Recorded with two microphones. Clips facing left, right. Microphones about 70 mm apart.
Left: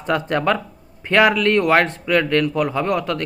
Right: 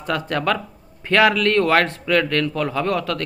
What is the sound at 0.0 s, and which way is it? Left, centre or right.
A man's voice, left.